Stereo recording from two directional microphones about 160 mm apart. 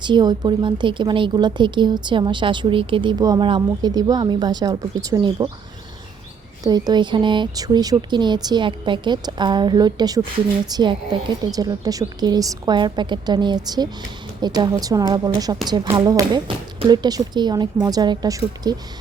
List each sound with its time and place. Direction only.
0.0 s speech: 25° right (ahead or behind)
6.7 s speech: 25° right (ahead or behind)